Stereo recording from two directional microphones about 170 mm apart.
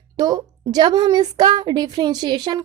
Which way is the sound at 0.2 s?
20° right (ahead or behind).